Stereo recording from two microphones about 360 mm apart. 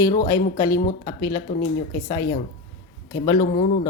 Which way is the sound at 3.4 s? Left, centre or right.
Left.